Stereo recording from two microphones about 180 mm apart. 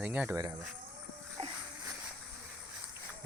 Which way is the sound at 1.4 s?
35° right (ahead or behind).